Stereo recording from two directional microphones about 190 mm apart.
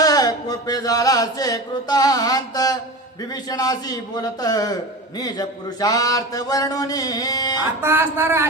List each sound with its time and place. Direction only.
0.0 s chant: 20° left (ahead or behind)
3.5 s a man's voice: 20° left (ahead or behind)
7.8 s speech: 15° right (ahead or behind)